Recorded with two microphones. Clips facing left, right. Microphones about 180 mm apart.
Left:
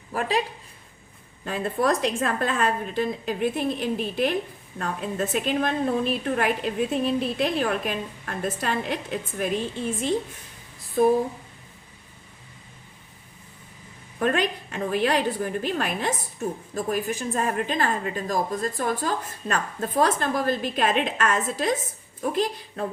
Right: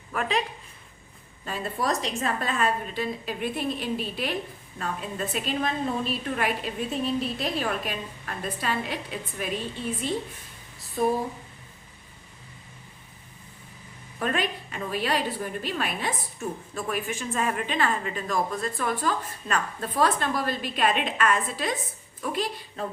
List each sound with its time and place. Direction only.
0.1 s speech: 35° left (ahead or behind)
1.5 s a woman's voice: 55° left (ahead or behind)
14.2 s a woman's voice: 45° left (ahead or behind)